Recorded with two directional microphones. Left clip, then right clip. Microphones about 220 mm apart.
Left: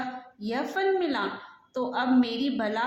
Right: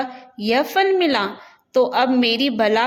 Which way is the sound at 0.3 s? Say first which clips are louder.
Right 12 dB; 40° right (ahead or behind).